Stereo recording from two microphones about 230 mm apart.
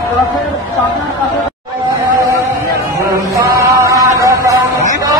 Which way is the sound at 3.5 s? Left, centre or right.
Centre.